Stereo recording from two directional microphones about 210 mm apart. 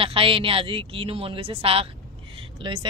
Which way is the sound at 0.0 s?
25° right (ahead or behind).